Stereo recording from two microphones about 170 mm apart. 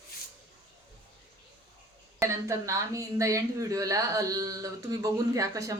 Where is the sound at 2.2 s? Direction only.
20° right (ahead or behind).